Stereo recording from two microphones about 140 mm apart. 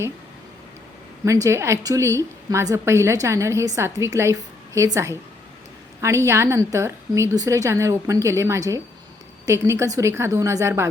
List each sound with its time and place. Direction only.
1.2 s a woman's voice: 20° right (ahead or behind)